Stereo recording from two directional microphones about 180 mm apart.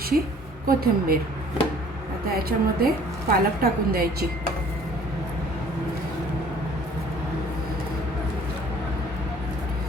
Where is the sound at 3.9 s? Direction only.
55° right (ahead or behind).